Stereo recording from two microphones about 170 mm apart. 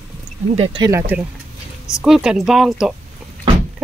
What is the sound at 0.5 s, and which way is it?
Speech, 30° right (ahead or behind).